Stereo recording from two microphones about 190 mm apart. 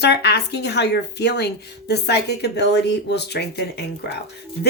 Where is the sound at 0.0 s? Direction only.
60° left (ahead or behind).